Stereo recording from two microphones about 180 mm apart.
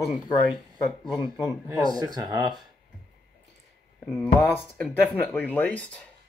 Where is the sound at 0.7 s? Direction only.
25° left (ahead or behind).